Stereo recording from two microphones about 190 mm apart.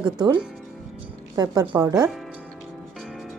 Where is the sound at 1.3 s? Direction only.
20° right (ahead or behind).